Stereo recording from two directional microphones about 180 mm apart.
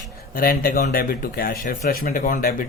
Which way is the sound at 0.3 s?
55° left (ahead or behind).